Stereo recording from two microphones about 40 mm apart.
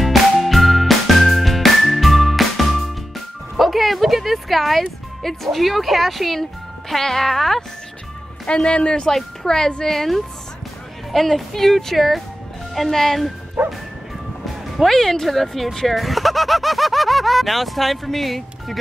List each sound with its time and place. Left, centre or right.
0.0 s music: centre
6.9 s speech: centre
8.5 s a man's voice: left
9.1 s speech: centre
9.8 s speech: centre
13.6 s bow-wow: right
14.4 s speech: centre